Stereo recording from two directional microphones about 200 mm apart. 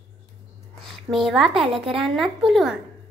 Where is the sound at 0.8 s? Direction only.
Centre (ahead or behind).